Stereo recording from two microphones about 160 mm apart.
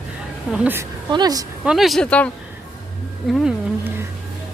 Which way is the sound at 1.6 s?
Centre (ahead or behind).